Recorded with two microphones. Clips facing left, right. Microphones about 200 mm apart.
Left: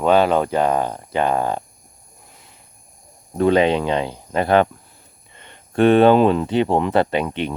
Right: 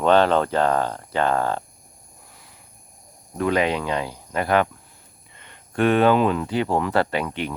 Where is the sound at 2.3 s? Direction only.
20° left (ahead or behind).